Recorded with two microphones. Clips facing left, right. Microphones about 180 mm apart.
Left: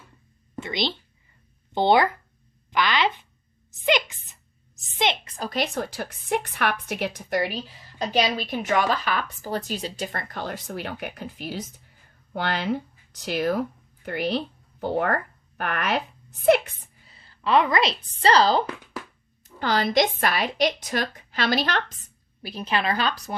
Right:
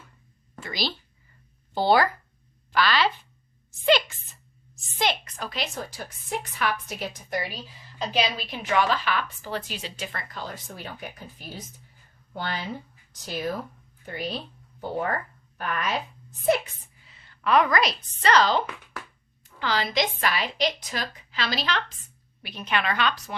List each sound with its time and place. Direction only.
0.6 s a woman's voice: 20° left (ahead or behind)
5.5 s a woman's voice: 60° left (ahead or behind)
8.4 s a woman's voice: 45° left (ahead or behind)
10.3 s speech: 65° left (ahead or behind)
17.1 s a woman's voice: 35° left (ahead or behind)
19.6 s a woman's voice: 50° left (ahead or behind)
22.4 s a woman's voice: 35° left (ahead or behind)